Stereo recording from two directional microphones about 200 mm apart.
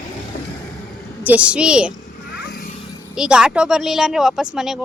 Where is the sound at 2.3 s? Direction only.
55° left (ahead or behind).